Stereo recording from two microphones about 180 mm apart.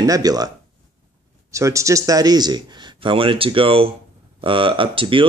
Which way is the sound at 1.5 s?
15° right (ahead or behind).